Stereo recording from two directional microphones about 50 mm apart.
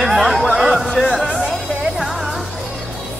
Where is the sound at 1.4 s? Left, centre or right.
Centre.